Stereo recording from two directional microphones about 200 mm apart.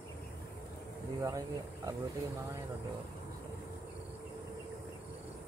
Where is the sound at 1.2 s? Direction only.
15° right (ahead or behind).